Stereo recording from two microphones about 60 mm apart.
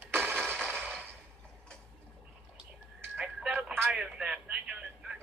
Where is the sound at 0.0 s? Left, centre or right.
Right.